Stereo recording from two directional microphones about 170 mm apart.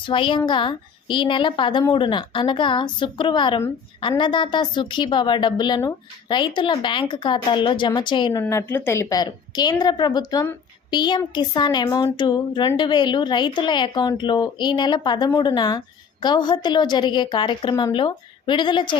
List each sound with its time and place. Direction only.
0.0 s speech: 30° left (ahead or behind)
8.4 s speech: 15° left (ahead or behind)